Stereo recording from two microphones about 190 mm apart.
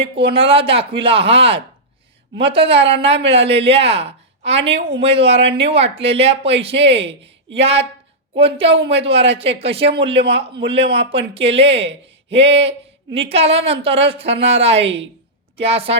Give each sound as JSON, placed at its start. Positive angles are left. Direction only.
{"t": 0.3, "sound": "speech", "side_deg": -30}